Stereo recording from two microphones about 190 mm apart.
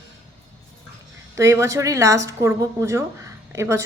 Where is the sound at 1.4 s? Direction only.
15° right (ahead or behind).